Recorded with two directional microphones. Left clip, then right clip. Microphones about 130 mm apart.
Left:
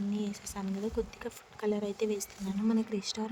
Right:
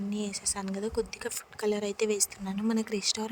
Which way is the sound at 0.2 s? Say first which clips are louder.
Right 5 dB; 45° right (ahead or behind).